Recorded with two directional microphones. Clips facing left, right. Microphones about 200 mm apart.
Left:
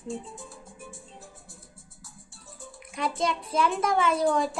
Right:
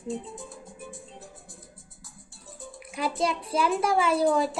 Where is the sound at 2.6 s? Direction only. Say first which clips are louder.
Right 1 dB; 5° right (ahead or behind).